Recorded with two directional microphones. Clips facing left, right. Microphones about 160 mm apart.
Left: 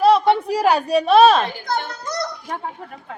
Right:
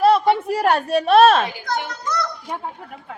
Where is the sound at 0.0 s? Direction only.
Centre (ahead or behind).